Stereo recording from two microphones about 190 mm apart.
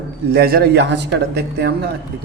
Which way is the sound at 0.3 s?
55° right (ahead or behind).